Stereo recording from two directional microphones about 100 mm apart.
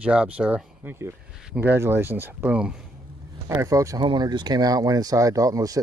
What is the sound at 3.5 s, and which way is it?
Speech, 30° right (ahead or behind).